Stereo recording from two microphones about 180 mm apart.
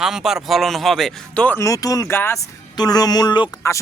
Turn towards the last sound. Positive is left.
turn(degrees=25)  # may be behind; listen again after turning